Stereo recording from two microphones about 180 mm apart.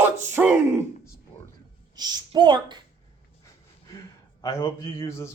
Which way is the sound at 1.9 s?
25° right (ahead or behind).